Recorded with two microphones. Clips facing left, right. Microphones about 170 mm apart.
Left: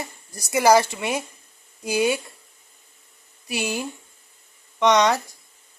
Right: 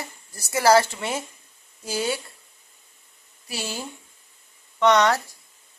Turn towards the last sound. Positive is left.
turn(degrees=15)  # may be behind; listen again after turning